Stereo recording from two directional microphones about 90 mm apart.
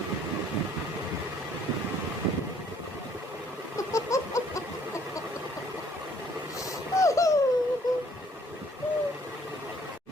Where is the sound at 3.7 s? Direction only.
35° left (ahead or behind).